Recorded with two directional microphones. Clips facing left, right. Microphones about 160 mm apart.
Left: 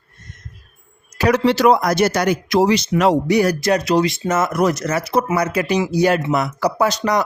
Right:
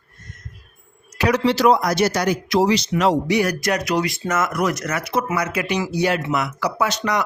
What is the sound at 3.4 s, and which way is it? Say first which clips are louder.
Speech: left 4 dB; 30° left (ahead or behind).